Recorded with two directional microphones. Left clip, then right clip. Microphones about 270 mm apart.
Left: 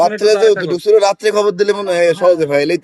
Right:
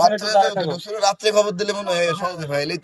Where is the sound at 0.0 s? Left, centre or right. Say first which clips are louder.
Left 5 dB; left.